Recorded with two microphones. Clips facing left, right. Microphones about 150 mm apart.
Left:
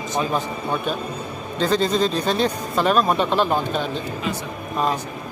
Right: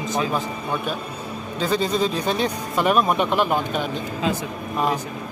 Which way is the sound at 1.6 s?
10° right (ahead or behind).